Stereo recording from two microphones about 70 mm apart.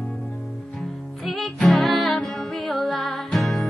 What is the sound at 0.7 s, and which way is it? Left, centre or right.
Music, centre.